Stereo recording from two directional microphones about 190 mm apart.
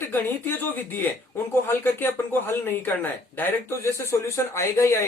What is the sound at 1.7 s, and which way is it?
Speech, 10° left (ahead or behind).